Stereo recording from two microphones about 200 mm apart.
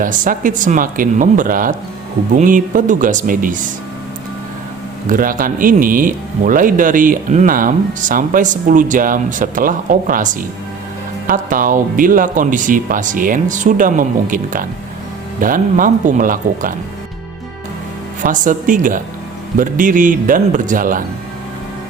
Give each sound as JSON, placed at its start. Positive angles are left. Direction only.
{"t": 0.0, "sound": "speech", "side_deg": -40}
{"t": 5.0, "sound": "speech", "side_deg": -45}
{"t": 18.2, "sound": "speech", "side_deg": -40}